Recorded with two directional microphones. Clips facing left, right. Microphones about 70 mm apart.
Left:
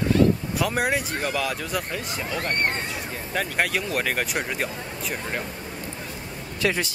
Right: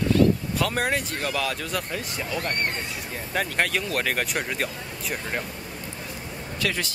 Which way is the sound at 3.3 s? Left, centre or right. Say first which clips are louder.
Even; centre.